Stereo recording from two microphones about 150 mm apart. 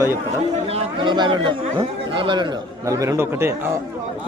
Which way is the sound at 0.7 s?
35° right (ahead or behind).